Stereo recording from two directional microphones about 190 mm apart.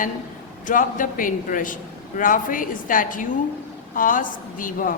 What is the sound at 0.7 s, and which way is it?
A man's voice, 45° left (ahead or behind).